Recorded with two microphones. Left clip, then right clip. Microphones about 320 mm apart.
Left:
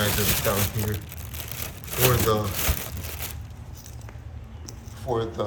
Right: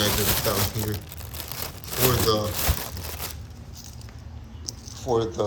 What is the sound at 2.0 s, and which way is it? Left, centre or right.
Speech, centre.